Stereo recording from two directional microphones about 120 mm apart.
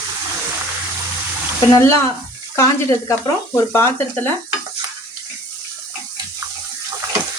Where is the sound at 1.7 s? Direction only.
25° left (ahead or behind).